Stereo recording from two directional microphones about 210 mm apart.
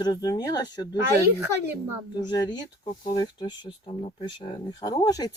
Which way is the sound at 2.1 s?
20° left (ahead or behind).